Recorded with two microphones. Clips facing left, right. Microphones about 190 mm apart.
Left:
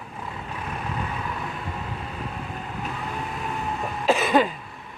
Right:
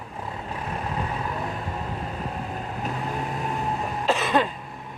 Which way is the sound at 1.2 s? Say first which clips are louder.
Right 2 dB; 35° right (ahead or behind).